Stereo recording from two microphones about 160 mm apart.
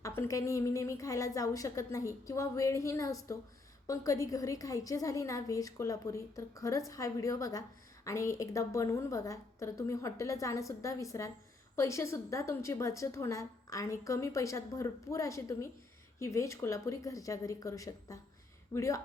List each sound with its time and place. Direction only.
0.2 s a woman's voice: 20° left (ahead or behind)